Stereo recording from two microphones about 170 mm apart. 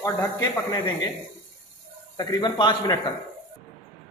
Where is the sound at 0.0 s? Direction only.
20° left (ahead or behind).